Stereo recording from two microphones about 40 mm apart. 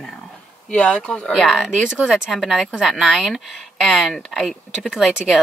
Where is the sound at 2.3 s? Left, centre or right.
Centre.